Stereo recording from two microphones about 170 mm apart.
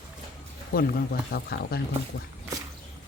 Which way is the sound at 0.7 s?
65° left (ahead or behind).